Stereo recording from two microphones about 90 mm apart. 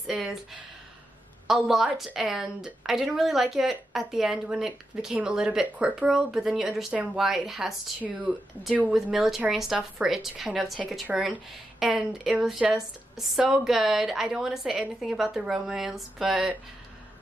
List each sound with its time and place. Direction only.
0.0 s a woman's voice: centre (ahead or behind)
8.0 s speech: 15° right (ahead or behind)
8.9 s a woman's voice: 5° right (ahead or behind)